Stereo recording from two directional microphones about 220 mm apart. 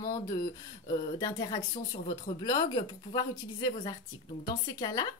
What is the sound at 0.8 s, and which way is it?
A woman's voice, 15° left (ahead or behind).